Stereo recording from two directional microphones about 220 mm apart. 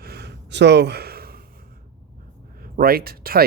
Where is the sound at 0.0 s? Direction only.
50° right (ahead or behind).